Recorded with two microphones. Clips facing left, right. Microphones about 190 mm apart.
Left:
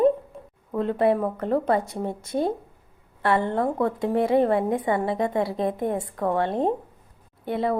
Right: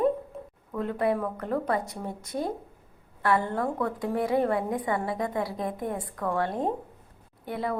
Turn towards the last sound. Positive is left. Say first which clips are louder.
# left 6 dB
turn(degrees=25)  # may be behind; listen again after turning